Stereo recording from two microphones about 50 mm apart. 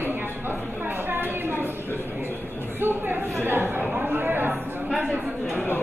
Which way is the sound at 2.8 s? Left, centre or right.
Right.